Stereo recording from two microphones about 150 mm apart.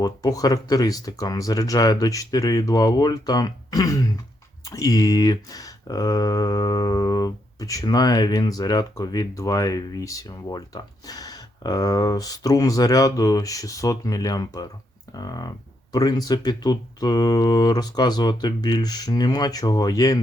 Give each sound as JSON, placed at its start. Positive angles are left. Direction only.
{"t": 0.0, "sound": "speech", "side_deg": 25}